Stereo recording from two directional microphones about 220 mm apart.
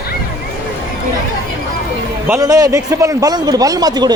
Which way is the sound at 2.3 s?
15° right (ahead or behind).